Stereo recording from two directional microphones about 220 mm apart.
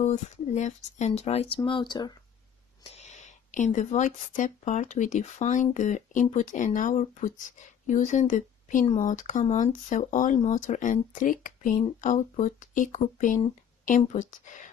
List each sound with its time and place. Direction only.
0.0 s speech: 30° left (ahead or behind)
2.8 s speech: 30° left (ahead or behind)